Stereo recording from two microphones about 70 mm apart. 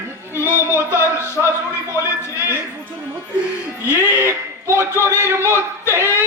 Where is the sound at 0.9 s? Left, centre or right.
Right.